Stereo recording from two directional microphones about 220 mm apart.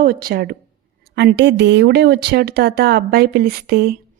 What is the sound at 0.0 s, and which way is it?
A woman's voice, 40° right (ahead or behind).